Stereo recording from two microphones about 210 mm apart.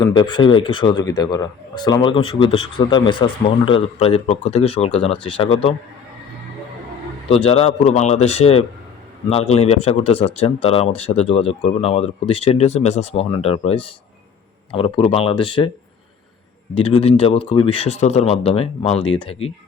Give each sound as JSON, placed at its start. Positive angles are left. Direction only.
{"t": 0.0, "sound": "speech", "side_deg": 20}
{"t": 7.3, "sound": "speech", "side_deg": 25}
{"t": 16.7, "sound": "speech", "side_deg": 25}